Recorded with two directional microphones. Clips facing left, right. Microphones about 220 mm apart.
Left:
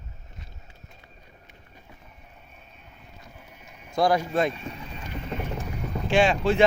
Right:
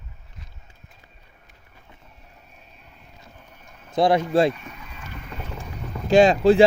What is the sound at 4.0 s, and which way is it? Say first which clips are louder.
Speech: right 3 dB; 25° right (ahead or behind).